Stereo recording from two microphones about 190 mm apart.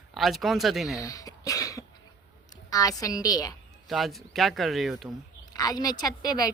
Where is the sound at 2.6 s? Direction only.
20° left (ahead or behind).